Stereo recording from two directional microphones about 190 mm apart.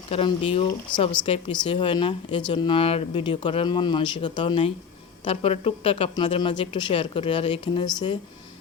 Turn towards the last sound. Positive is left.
turn(degrees=25)  # may be behind; listen again after turning